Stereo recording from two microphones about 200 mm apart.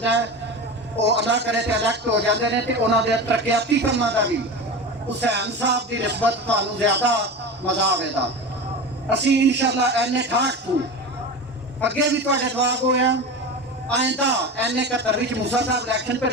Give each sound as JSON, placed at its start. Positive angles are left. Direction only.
{"t": 0.0, "sound": "a man's voice", "side_deg": -60}
{"t": 5.3, "sound": "a man's voice", "side_deg": -60}
{"t": 11.8, "sound": "a man's voice", "side_deg": -60}